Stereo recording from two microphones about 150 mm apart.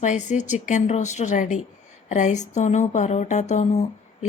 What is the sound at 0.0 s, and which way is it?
A woman's voice, 55° left (ahead or behind).